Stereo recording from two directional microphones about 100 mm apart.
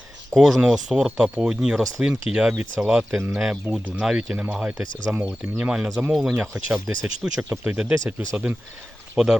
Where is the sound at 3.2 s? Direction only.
25° right (ahead or behind).